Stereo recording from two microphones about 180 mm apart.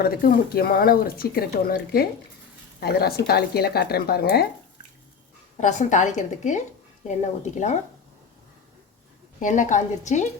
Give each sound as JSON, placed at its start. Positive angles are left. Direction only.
{"t": 0.0, "sound": "speech", "side_deg": 55}
{"t": 5.5, "sound": "a woman's voice", "side_deg": 40}
{"t": 9.4, "sound": "a woman's voice", "side_deg": 45}